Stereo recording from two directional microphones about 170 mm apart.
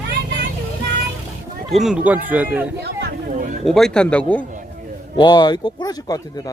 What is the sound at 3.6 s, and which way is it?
Speech, centre (ahead or behind).